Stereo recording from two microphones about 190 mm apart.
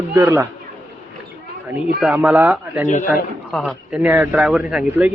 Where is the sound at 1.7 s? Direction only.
10° right (ahead or behind).